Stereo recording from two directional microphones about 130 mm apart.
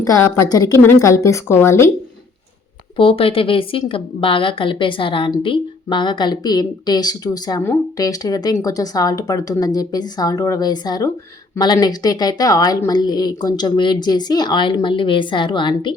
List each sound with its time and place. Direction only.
0.0 s a woman's voice: 25° left (ahead or behind)
3.0 s a woman's voice: 45° left (ahead or behind)